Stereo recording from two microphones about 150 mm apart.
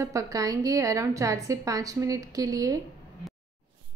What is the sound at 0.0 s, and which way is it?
A woman's voice, 20° right (ahead or behind).